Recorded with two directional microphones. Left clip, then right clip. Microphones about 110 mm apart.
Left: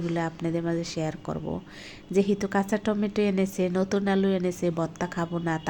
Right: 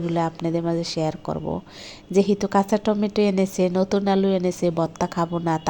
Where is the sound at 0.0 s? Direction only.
25° right (ahead or behind).